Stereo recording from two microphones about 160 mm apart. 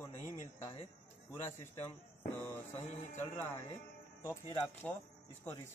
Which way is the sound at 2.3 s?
15° left (ahead or behind).